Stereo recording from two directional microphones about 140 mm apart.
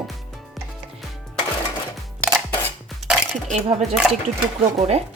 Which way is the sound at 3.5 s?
50° right (ahead or behind).